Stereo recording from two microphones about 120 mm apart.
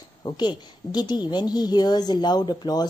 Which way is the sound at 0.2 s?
35° left (ahead or behind).